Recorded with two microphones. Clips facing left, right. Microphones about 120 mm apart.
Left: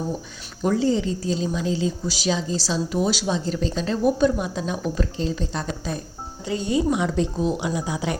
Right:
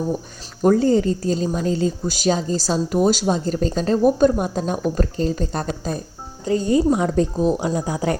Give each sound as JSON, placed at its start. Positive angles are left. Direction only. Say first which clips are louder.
{"t": 0.6, "sound": "speech", "louder": "right 5 dB", "side_deg": -50}